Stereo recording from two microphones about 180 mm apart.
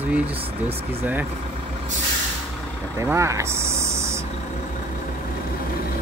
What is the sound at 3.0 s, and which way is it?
Vehicle, 15° right (ahead or behind).